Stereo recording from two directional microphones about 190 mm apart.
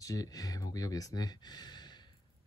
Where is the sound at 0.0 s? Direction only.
20° left (ahead or behind).